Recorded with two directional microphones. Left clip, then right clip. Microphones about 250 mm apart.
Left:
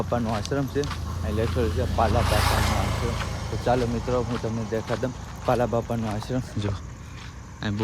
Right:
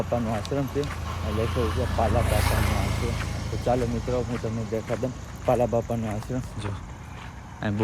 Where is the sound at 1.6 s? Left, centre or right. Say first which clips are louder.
Left 2 dB; centre.